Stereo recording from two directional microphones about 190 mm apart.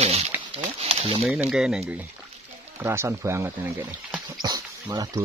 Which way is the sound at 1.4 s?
5° right (ahead or behind).